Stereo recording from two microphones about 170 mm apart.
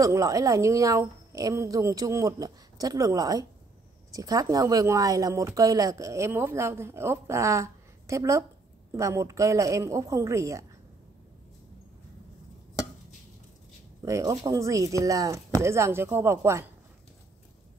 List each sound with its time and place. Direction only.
0.0 s a woman's voice: 20° right (ahead or behind)
14.0 s a woman's voice: 20° right (ahead or behind)